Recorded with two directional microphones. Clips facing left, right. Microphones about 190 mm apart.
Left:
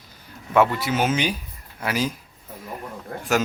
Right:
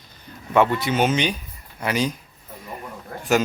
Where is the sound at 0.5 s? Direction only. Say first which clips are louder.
Right 1 dB; 5° left (ahead or behind).